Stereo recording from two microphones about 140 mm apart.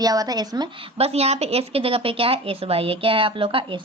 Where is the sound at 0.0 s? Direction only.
25° right (ahead or behind).